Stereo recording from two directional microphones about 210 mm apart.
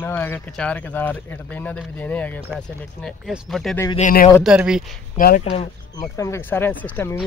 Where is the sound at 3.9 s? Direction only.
40° left (ahead or behind).